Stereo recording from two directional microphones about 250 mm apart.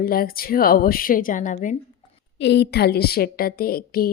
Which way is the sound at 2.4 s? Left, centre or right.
Left.